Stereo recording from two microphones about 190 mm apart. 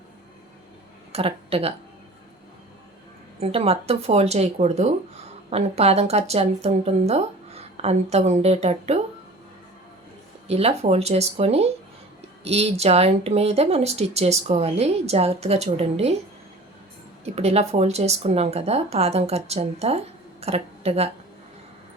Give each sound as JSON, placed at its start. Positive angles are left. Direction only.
{"t": 1.1, "sound": "speech", "side_deg": -30}
{"t": 3.4, "sound": "speech", "side_deg": -30}
{"t": 10.5, "sound": "speech", "side_deg": -35}
{"t": 17.2, "sound": "speech", "side_deg": -35}